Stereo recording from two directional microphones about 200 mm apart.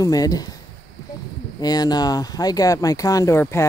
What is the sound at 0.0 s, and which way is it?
Speech, 20° left (ahead or behind).